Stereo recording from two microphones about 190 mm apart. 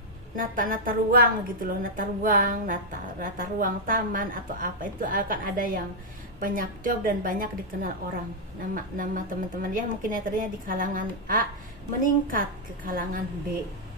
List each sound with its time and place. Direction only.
0.4 s a woman's voice: 45° right (ahead or behind)